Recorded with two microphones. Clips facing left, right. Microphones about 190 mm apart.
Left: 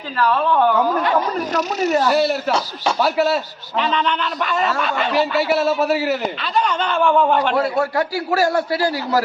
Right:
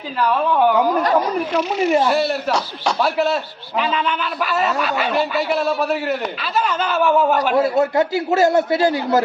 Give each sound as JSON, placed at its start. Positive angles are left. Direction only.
{"t": 0.2, "sound": "speech", "side_deg": -15}
{"t": 1.5, "sound": "speech", "side_deg": 40}
{"t": 2.0, "sound": "speech", "side_deg": 0}
{"t": 7.5, "sound": "a man's voice", "side_deg": -20}